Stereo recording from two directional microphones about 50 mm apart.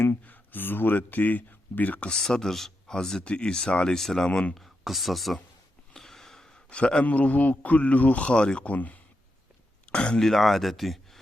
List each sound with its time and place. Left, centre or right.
0.3 s speech: left
2.2 s a man's voice: centre
3.9 s speech: centre
5.9 s a sound: centre
6.7 s a man's voice: left
7.0 s a man's voice: left
8.3 s speech: centre
8.7 s a man's voice: left
9.9 s speech: left
10.2 s speech: centre